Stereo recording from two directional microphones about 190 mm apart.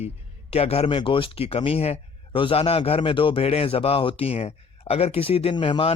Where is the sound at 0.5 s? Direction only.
30° left (ahead or behind).